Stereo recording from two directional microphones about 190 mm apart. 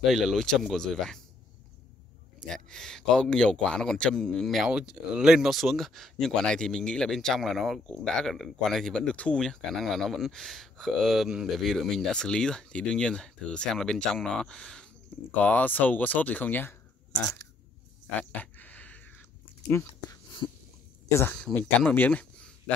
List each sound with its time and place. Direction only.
0.0 s speech: centre (ahead or behind)
2.4 s speech: centre (ahead or behind)
18.3 s a sound: 10° left (ahead or behind)
21.1 s speech: 15° left (ahead or behind)